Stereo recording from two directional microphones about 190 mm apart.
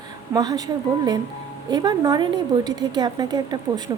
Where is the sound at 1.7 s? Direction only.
20° right (ahead or behind).